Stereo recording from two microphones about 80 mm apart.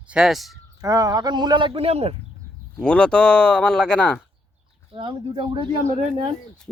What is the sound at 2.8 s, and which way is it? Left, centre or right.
Speech, centre.